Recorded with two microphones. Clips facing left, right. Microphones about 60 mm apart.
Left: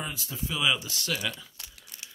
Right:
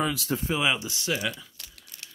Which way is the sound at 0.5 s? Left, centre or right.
Right.